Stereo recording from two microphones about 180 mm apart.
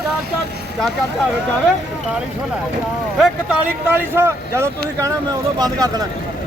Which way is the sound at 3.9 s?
10° right (ahead or behind).